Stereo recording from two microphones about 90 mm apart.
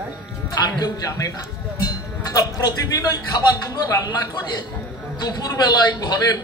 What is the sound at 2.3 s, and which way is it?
A man's voice, 40° left (ahead or behind).